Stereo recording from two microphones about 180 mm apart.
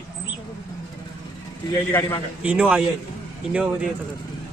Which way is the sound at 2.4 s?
5° right (ahead or behind).